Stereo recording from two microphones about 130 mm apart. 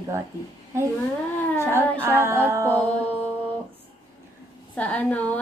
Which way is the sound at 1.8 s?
20° right (ahead or behind).